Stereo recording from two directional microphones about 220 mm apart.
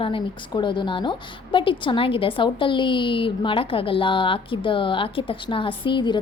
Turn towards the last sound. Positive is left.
turn(degrees=20)  # may be behind; listen again after turning